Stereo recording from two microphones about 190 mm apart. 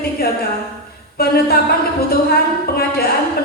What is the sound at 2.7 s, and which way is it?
Speech, 55° left (ahead or behind).